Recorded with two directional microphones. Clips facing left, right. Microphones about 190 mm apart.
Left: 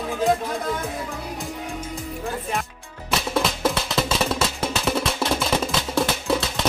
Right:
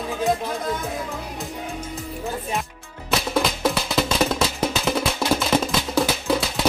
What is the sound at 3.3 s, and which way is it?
Music, centre (ahead or behind).